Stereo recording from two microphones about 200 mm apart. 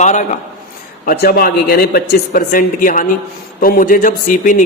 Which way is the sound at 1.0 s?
50° left (ahead or behind).